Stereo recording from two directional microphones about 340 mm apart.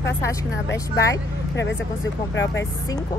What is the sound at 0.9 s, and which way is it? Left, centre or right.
Speech, centre.